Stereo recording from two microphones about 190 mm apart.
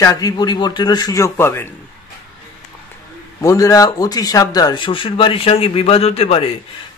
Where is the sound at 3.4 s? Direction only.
15° left (ahead or behind).